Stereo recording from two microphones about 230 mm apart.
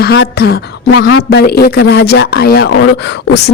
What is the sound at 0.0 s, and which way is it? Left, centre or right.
A woman's voice, left.